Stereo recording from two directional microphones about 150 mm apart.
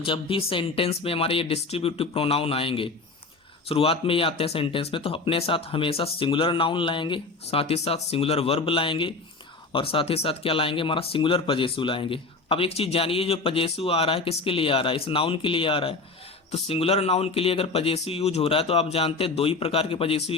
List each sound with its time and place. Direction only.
0.0 s speech: 35° left (ahead or behind)